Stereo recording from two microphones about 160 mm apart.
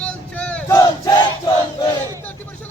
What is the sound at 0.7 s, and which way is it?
Battle cry, 20° left (ahead or behind).